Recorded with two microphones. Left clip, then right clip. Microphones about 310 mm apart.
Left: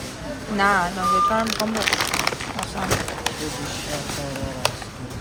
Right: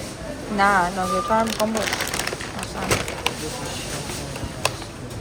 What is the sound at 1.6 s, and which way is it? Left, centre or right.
Speech, left.